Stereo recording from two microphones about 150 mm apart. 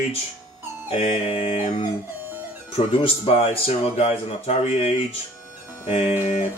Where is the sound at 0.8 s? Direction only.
45° left (ahead or behind).